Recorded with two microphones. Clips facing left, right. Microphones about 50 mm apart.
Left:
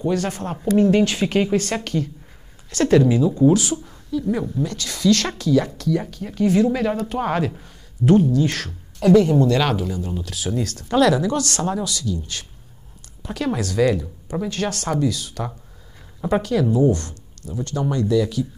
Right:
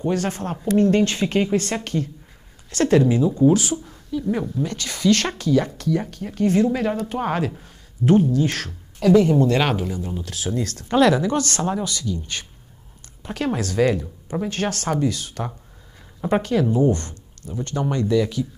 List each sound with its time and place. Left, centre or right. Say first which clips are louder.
0.0 s speech: left 1 dB; centre
10.9 s speech: even; centre